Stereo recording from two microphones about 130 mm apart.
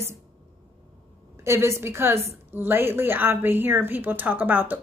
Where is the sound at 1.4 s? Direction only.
20° right (ahead or behind).